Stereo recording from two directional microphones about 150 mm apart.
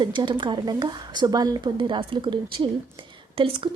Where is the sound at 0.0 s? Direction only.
30° right (ahead or behind).